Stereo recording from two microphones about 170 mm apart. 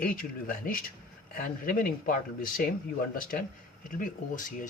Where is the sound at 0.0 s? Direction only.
55° left (ahead or behind).